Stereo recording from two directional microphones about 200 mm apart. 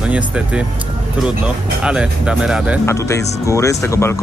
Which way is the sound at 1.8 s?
5° right (ahead or behind).